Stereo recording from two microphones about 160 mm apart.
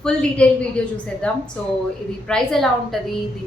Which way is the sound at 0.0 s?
5° left (ahead or behind).